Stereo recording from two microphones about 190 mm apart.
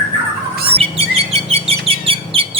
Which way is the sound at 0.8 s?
30° right (ahead or behind).